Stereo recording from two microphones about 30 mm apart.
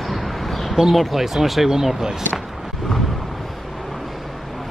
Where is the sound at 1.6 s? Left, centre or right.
Centre.